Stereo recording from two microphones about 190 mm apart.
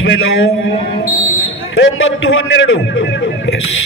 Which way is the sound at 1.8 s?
90° left.